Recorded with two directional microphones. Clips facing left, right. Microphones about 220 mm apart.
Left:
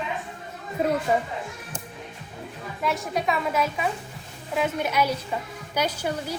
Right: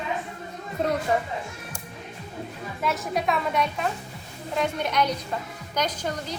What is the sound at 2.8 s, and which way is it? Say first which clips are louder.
A woman's voice: even; centre (ahead or behind).